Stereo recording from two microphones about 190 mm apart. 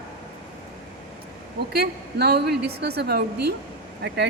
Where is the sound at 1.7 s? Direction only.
55° right (ahead or behind).